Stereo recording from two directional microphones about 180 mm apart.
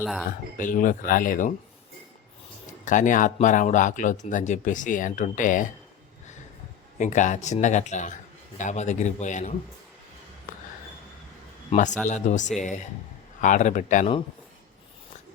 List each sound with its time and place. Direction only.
0.0 s speech: centre (ahead or behind)
0.5 s speech: 50° left (ahead or behind)
2.8 s speech: 45° left (ahead or behind)
7.0 s a man's voice: 45° left (ahead or behind)
11.7 s a man's voice: 40° left (ahead or behind)